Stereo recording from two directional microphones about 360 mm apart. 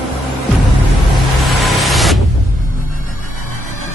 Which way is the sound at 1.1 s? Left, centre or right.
Centre.